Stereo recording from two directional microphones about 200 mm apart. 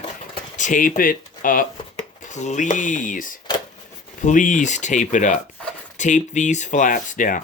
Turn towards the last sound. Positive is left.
turn(degrees=40)  # may be behind; listen again after turning